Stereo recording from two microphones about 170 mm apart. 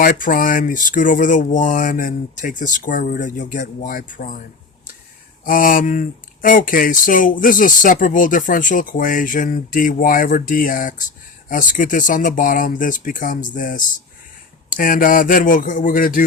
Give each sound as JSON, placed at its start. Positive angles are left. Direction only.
{"t": 0.0, "sound": "speech", "side_deg": 55}
{"t": 5.5, "sound": "speech", "side_deg": 55}